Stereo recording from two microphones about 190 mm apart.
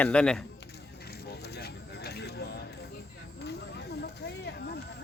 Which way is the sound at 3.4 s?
60° left (ahead or behind).